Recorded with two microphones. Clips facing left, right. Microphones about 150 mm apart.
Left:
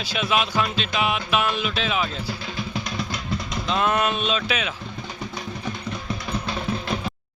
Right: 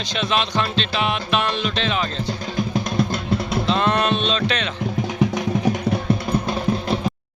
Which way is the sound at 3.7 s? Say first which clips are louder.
Right 2 dB; 5° left (ahead or behind).